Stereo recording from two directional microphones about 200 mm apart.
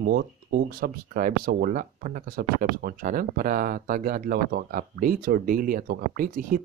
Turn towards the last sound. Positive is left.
turn(degrees=-45)  # may be behind; listen again after turning